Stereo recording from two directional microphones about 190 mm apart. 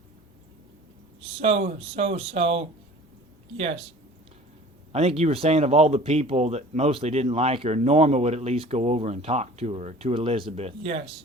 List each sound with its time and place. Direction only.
1.4 s speech: 30° right (ahead or behind)
4.9 s speech: 30° right (ahead or behind)